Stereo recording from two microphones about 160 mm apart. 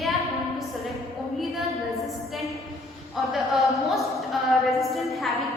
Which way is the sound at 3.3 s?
Centre (ahead or behind).